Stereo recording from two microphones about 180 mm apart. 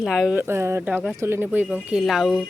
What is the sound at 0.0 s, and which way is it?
Speech, centre (ahead or behind).